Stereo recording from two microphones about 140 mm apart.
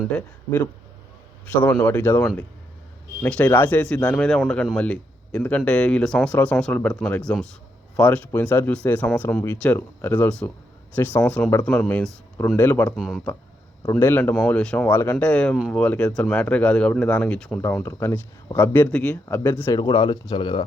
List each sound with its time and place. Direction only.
0.1 s speech: 15° left (ahead or behind)
1.8 s speech: 10° left (ahead or behind)
13.0 s speech: centre (ahead or behind)
13.9 s speech: 15° left (ahead or behind)
17.6 s speech: 20° left (ahead or behind)
19.7 s speech: 30° left (ahead or behind)